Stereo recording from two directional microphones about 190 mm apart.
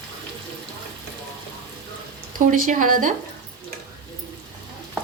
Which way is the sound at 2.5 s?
45° right (ahead or behind).